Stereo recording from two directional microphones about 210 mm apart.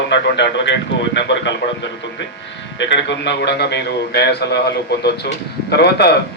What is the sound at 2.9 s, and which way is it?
A man's voice, 55° left (ahead or behind).